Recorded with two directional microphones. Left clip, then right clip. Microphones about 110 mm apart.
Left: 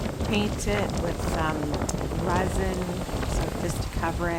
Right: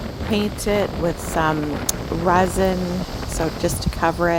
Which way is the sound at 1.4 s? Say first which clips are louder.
Right 9 dB; 90° right.